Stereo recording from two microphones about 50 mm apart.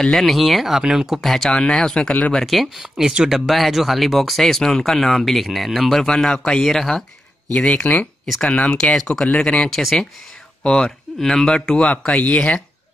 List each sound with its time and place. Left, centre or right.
0.0 s speech: centre
1.2 s speech: centre
2.4 s speech: centre
7.5 s speech: left
9.7 s speech: centre
10.6 s speech: centre